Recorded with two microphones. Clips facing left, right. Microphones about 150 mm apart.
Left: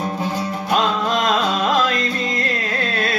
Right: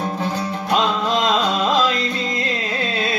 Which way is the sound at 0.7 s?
20° right (ahead or behind).